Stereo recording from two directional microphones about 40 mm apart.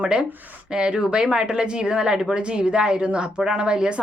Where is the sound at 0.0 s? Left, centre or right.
Right.